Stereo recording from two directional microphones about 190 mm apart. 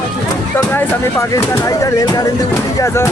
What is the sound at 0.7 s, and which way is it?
Speech, 15° left (ahead or behind).